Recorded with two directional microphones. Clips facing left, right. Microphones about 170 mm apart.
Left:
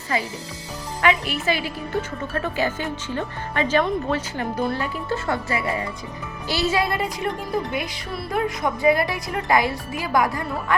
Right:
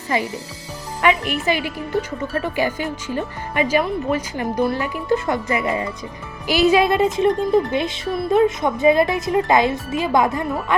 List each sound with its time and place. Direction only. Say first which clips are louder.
1.3 s speech: right 3 dB; 15° right (ahead or behind)